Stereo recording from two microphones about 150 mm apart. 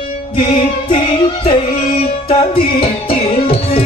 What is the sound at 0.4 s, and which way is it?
Music, 35° left (ahead or behind).